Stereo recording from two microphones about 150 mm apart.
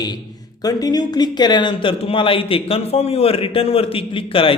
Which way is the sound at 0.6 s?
25° left (ahead or behind).